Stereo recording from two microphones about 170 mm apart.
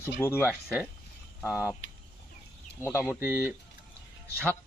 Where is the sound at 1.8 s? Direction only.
90° left.